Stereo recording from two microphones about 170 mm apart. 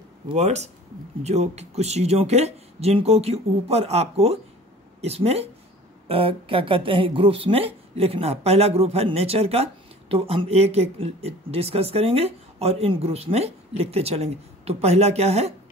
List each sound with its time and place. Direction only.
0.3 s a woman's voice: 40° right (ahead or behind)